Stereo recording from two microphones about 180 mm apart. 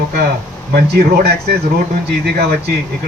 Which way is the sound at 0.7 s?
60° right (ahead or behind).